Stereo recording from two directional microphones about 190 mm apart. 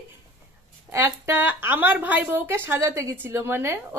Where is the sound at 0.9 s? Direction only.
15° right (ahead or behind).